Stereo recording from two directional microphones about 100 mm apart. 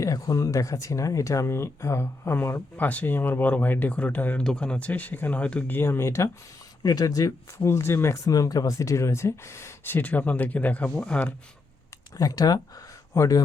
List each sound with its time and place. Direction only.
0.0 s speech: 35° left (ahead or behind)
6.8 s speech: 40° left (ahead or behind); by 11.3 s 15° left (ahead or behind)
12.1 s speech: 40° left (ahead or behind)